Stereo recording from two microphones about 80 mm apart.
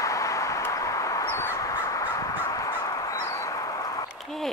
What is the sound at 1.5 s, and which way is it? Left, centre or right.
Crow, left.